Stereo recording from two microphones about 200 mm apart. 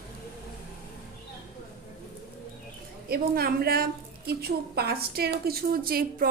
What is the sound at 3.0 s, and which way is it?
A woman's voice, 50° right (ahead or behind).